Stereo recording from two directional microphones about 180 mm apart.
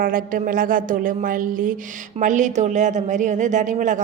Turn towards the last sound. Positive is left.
turn(degrees=-45)  # may be behind; listen again after turning